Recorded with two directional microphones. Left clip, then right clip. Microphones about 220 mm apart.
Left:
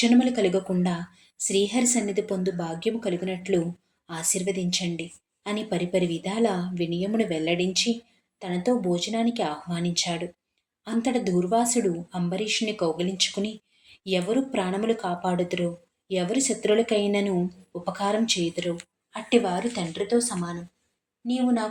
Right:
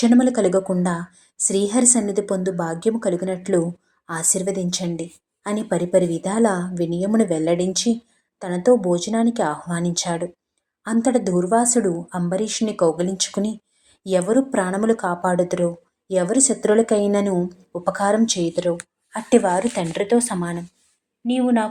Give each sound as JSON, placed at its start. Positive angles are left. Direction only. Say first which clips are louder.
{"t": 0.2, "sound": "speech", "louder": "right 5 dB", "side_deg": -20}